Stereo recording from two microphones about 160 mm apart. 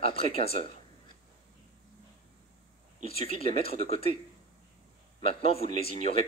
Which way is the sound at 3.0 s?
35° left (ahead or behind).